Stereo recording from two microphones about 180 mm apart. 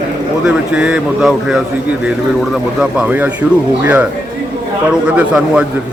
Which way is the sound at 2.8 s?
5° right (ahead or behind).